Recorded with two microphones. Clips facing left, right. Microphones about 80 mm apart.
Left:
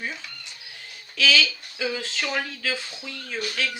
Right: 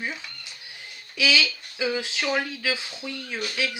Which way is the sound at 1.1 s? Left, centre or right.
Centre.